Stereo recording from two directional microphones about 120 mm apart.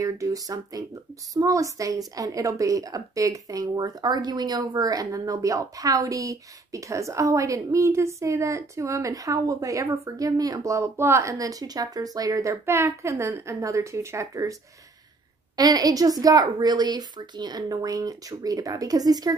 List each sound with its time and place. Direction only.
0.0 s a woman's voice: 30° right (ahead or behind)
15.5 s a woman's voice: 30° right (ahead or behind)